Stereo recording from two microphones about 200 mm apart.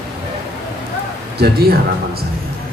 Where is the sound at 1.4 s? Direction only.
50° right (ahead or behind).